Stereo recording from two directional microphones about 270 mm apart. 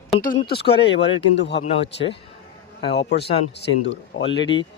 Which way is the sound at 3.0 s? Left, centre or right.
Left.